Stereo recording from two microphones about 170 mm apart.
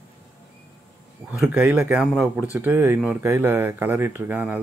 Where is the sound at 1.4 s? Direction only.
5° right (ahead or behind).